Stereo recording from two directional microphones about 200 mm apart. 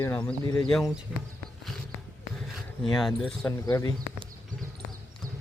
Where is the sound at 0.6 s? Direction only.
Centre (ahead or behind).